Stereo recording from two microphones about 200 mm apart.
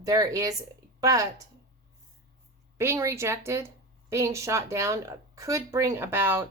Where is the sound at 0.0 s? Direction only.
20° right (ahead or behind).